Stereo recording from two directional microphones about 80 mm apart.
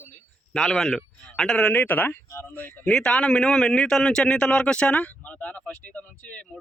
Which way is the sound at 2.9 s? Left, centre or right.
Centre.